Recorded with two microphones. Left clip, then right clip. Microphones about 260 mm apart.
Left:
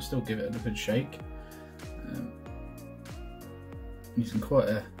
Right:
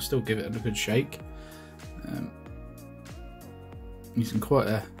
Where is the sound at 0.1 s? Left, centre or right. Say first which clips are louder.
Right 4 dB; right.